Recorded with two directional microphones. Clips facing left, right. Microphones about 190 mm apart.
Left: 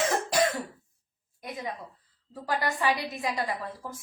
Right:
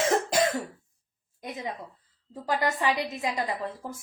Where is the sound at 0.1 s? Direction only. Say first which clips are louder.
Right 2 dB; 25° right (ahead or behind).